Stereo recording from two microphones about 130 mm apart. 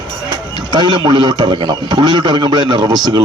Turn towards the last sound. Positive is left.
turn(degrees=-30)  # may be behind; listen again after turning